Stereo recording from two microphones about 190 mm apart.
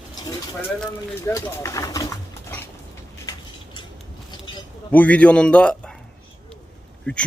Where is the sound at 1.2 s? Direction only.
15° left (ahead or behind).